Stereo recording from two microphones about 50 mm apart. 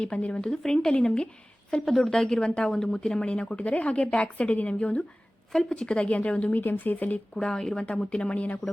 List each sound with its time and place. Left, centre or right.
0.0 s a woman's voice: left
1.8 s a woman's voice: centre; by 5.0 s left
5.5 s a woman's voice: centre; by 6.6 s left
6.6 s speech: left
7.3 s a woman's voice: centre